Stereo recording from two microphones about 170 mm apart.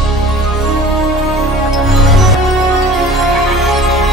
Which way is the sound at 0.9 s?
Centre (ahead or behind).